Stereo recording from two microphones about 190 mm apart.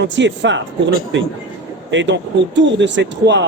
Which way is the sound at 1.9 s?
70° right (ahead or behind).